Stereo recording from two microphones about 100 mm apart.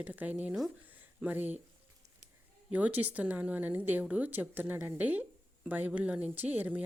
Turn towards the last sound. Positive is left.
turn(degrees=-15)  # may be behind; listen again after turning